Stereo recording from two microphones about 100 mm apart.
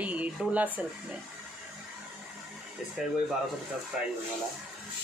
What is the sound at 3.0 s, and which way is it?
Speech, 5° right (ahead or behind).